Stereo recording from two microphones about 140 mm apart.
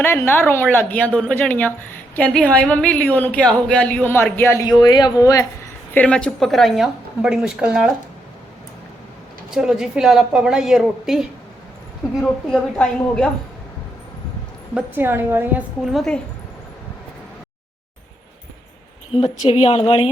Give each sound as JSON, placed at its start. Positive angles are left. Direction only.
{"t": 0.0, "sound": "a woman's voice", "side_deg": 15}
{"t": 4.8, "sound": "speech", "side_deg": 30}
{"t": 5.9, "sound": "a woman's voice", "side_deg": 10}
{"t": 9.6, "sound": "a woman's voice", "side_deg": -5}
{"t": 14.8, "sound": "a woman's voice", "side_deg": -15}
{"t": 15.8, "sound": "a woman's voice", "side_deg": 0}
{"t": 19.1, "sound": "a woman's voice", "side_deg": 40}